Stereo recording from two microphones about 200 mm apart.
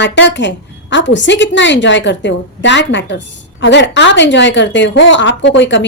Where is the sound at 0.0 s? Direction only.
60° left (ahead or behind).